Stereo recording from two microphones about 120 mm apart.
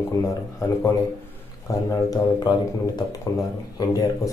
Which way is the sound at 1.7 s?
30° left (ahead or behind).